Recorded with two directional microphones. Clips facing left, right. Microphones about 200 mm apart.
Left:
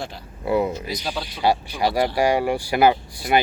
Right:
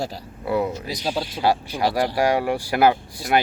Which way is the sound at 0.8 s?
35° right (ahead or behind).